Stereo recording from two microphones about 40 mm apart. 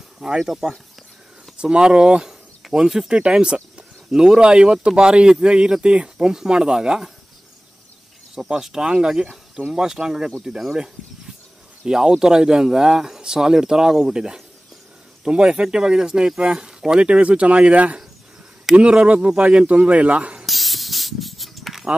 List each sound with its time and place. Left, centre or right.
0.4 s speech: centre
1.6 s speech: right
3.1 s speech: right
4.1 s speech: centre
6.2 s speech: centre
8.4 s speech: centre; by 17.9 s right
19.0 s speech: right
20.4 s spray: centre